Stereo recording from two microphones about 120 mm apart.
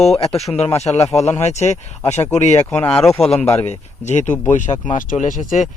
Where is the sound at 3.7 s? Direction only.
75° left (ahead or behind).